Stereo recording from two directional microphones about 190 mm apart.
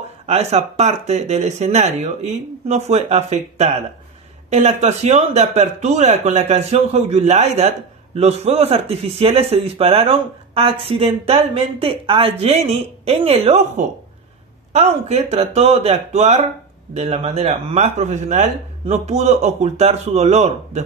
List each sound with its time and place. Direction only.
0.3 s speech: 35° right (ahead or behind)